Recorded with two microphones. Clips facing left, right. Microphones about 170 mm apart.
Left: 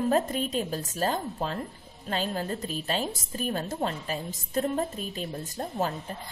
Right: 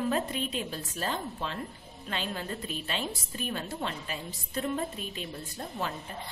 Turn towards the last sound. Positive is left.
turn(degrees=40)  # may be behind; listen again after turning